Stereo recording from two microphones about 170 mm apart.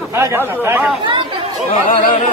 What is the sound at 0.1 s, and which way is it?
Speech, 15° right (ahead or behind).